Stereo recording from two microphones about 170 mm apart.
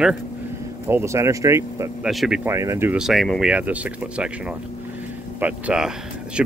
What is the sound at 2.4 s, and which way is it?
Speech, 15° right (ahead or behind).